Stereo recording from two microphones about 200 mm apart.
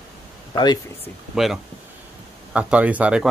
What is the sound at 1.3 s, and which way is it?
Speech, centre (ahead or behind).